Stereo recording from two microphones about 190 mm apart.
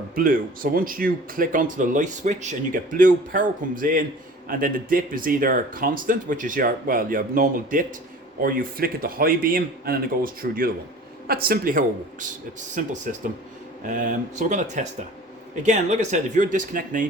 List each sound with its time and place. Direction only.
0.2 s speech: 50° right (ahead or behind)